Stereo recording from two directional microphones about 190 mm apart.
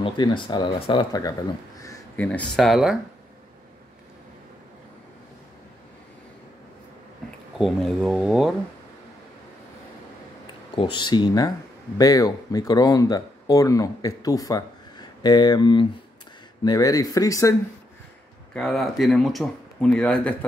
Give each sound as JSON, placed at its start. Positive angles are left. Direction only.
{"t": 0.0, "sound": "speech", "side_deg": 25}
{"t": 1.8, "sound": "a sound", "side_deg": 15}
{"t": 2.2, "sound": "speech", "side_deg": 5}
{"t": 7.5, "sound": "speech", "side_deg": 0}
{"t": 10.4, "sound": "speech", "side_deg": 25}
{"t": 18.5, "sound": "speech", "side_deg": 5}